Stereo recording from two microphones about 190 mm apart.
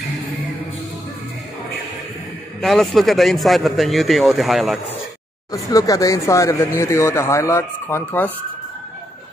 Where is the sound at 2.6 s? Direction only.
Centre (ahead or behind).